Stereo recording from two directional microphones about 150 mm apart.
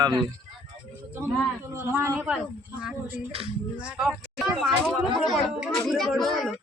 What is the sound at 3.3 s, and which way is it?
Speech, 40° right (ahead or behind).